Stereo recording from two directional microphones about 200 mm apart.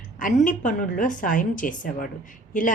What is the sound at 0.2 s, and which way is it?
A woman's voice, 40° left (ahead or behind).